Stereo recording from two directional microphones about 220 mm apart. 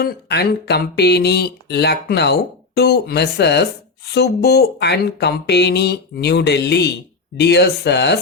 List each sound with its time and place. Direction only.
0.0 s speech: 50° left (ahead or behind)